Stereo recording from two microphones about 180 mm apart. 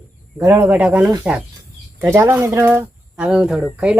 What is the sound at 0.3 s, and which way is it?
Speech, 10° right (ahead or behind).